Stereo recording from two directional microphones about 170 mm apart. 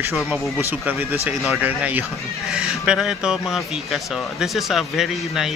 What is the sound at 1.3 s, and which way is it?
Speech, centre (ahead or behind).